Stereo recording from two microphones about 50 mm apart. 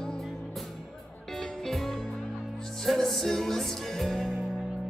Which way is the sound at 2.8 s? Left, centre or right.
Centre.